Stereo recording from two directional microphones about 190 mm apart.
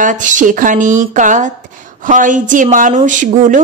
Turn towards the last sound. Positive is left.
turn(degrees=-40)  # may be behind; listen again after turning